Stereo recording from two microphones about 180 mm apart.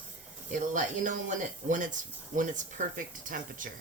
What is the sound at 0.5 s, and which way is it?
Speech, 45° right (ahead or behind).